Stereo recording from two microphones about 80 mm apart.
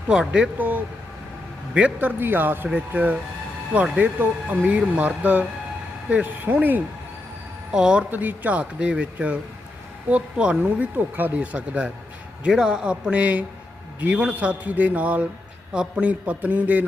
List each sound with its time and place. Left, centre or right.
0.1 s speech: centre
1.7 s a man's voice: centre
7.7 s speech: centre
8.1 s speech: right